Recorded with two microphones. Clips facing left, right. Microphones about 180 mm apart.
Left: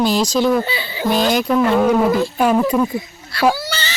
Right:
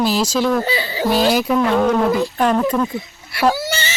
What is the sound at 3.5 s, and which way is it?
Baby cry, 20° right (ahead or behind).